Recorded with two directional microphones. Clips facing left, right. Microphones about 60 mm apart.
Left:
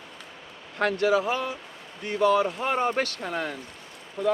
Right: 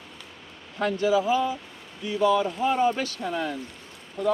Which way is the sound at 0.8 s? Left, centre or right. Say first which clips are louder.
Even; left.